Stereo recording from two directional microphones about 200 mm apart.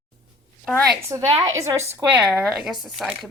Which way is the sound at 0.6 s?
5° left (ahead or behind).